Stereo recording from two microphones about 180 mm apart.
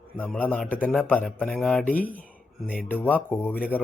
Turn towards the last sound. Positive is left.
turn(degrees=10)  # may be behind; listen again after turning